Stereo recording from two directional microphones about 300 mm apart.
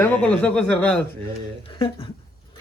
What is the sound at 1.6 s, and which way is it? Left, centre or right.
Speech, centre.